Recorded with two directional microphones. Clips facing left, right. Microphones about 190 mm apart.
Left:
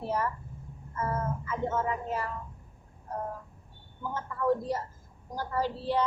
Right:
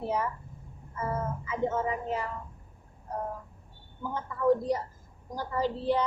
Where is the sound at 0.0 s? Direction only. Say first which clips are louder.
Right 1 dB; 15° right (ahead or behind).